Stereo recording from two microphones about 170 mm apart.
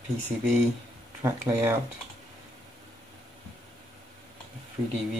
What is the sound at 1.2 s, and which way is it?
Speech, 15° right (ahead or behind).